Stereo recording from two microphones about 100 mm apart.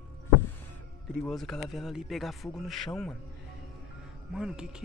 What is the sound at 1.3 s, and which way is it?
Speech, 5° left (ahead or behind).